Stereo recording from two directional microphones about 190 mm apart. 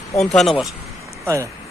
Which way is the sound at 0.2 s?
Centre (ahead or behind).